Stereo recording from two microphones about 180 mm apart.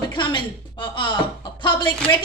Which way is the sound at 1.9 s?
5° left (ahead or behind).